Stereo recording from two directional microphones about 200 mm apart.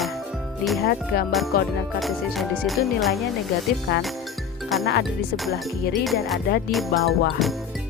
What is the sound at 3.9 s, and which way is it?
Music, 55° left (ahead or behind).